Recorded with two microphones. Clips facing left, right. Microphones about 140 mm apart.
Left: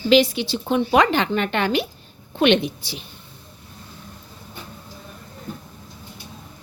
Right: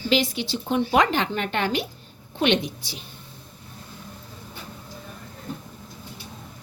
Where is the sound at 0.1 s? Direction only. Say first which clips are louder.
Left 7 dB; 75° left (ahead or behind).